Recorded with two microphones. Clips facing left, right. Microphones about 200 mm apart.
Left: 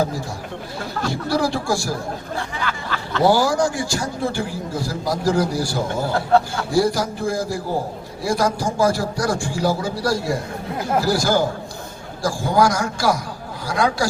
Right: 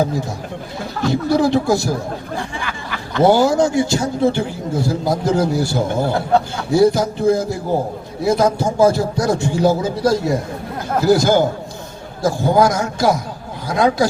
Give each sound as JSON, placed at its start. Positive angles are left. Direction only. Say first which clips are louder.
{"t": 1.0, "sound": "a man's voice", "louder": "right 6 dB", "side_deg": -20}